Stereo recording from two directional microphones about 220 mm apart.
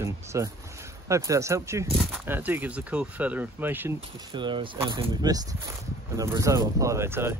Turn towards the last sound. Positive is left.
turn(degrees=-10)  # may be behind; listen again after turning